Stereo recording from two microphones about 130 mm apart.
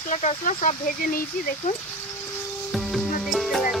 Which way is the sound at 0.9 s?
90° left.